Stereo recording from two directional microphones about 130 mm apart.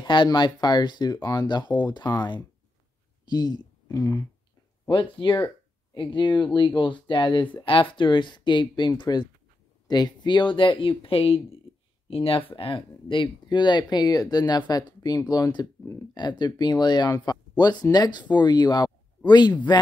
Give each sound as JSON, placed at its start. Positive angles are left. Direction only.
{"t": 0.0, "sound": "speech", "side_deg": 35}
{"t": 4.8, "sound": "speech", "side_deg": 40}